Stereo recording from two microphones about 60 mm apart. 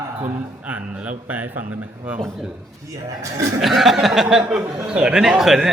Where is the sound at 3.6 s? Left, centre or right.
Centre.